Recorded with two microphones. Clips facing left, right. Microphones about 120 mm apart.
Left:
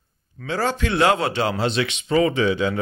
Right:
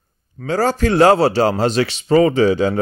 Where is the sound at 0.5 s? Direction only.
40° right (ahead or behind).